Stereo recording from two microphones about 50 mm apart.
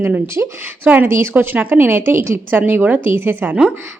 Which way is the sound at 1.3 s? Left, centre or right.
Right.